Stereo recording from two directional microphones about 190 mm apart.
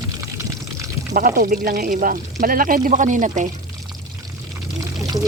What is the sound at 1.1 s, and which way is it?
Speech, 45° right (ahead or behind).